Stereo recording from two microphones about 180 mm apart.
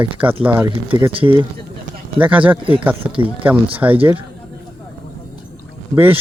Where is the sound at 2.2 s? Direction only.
10° right (ahead or behind).